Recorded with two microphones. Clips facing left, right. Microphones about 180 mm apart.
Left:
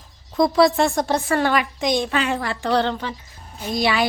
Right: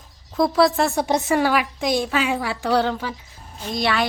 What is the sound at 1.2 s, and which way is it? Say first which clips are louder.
Speech: right 1 dB; 20° right (ahead or behind).